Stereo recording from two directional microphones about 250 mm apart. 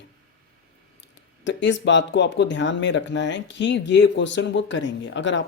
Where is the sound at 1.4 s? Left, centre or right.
Left.